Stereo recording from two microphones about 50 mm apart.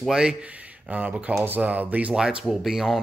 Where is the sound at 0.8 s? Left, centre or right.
Right.